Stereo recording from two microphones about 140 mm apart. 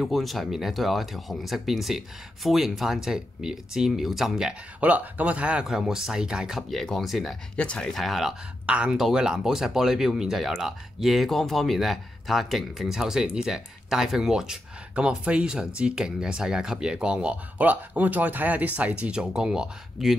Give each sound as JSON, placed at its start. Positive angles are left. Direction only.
{"t": 0.0, "sound": "speech", "side_deg": 0}